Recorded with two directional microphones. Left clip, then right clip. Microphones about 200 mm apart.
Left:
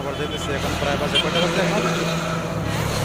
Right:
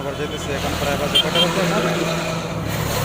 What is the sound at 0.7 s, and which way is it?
Speech, 55° right (ahead or behind).